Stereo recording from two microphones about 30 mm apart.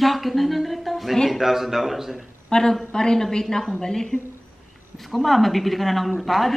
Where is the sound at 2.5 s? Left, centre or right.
Left.